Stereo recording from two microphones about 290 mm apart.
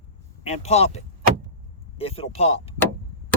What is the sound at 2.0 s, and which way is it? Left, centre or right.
Speech, centre.